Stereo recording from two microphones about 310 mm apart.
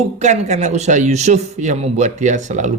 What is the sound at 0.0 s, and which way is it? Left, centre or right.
Speech, right.